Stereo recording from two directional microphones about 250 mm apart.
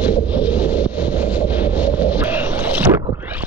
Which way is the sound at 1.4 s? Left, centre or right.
Centre.